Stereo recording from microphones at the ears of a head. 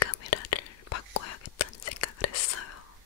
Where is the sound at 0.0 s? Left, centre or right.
Left.